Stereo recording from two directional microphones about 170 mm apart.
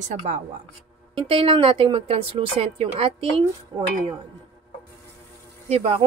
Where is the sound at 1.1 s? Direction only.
35° right (ahead or behind).